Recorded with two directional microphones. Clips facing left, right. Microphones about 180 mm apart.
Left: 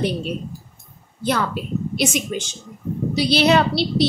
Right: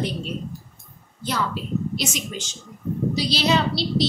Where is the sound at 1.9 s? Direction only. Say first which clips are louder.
Left 6 dB; 55° left (ahead or behind).